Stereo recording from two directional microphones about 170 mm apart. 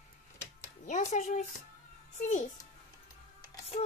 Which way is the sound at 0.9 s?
45° left (ahead or behind).